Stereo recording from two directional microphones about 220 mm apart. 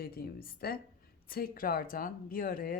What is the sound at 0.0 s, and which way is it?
A woman's voice, 45° left (ahead or behind).